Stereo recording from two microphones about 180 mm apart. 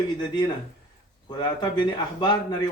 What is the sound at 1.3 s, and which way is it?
A man's voice, 25° left (ahead or behind).